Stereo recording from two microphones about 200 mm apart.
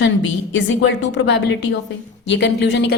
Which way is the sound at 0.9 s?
65° left (ahead or behind).